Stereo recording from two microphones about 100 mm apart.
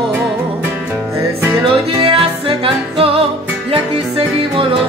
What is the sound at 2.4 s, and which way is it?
Music, 70° right (ahead or behind).